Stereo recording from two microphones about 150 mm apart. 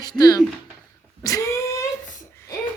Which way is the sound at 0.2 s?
25° left (ahead or behind).